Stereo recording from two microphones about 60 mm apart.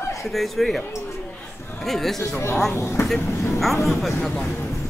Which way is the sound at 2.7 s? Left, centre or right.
Left.